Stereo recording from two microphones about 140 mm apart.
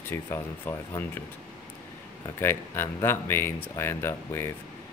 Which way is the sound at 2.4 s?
15° left (ahead or behind).